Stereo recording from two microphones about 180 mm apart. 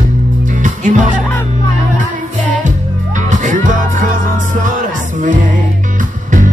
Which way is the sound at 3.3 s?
45° right (ahead or behind).